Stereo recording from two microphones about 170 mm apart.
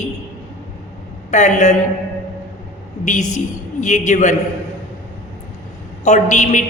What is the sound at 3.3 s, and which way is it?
A woman's voice, 45° left (ahead or behind).